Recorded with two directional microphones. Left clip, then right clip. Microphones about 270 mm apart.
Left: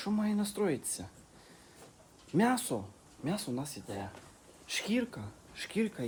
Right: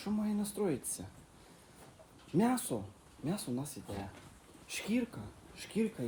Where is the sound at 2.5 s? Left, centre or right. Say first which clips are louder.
Left 3 dB; centre.